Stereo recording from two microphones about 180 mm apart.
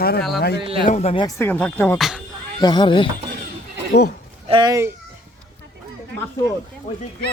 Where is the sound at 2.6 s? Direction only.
25° left (ahead or behind).